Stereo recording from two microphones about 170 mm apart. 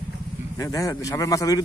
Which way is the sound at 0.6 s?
20° left (ahead or behind).